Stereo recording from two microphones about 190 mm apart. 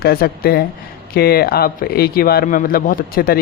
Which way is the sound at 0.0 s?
50° left (ahead or behind).